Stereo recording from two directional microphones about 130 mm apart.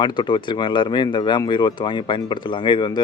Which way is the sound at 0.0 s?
35° left (ahead or behind).